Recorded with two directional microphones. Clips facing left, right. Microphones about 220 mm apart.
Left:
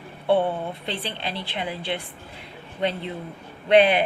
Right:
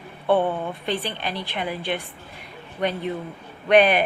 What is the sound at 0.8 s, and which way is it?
Speech, 15° right (ahead or behind).